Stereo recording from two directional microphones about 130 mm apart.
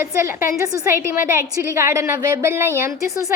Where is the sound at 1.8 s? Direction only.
20° right (ahead or behind).